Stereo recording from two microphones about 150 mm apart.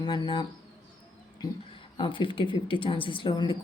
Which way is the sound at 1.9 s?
35° left (ahead or behind).